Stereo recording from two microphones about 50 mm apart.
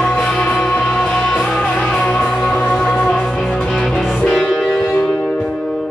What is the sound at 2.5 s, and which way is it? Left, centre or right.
Music, left.